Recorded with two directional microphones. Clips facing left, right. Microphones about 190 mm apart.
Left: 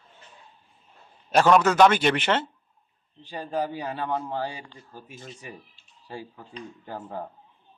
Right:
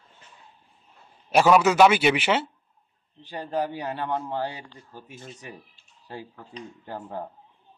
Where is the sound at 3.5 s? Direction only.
10° right (ahead or behind).